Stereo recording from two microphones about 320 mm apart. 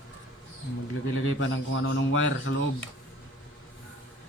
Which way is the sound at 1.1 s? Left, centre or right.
Left.